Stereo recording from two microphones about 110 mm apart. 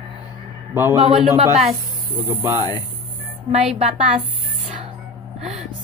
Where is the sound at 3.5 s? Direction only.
70° right (ahead or behind).